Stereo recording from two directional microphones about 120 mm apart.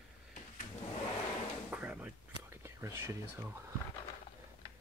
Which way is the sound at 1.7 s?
10° right (ahead or behind).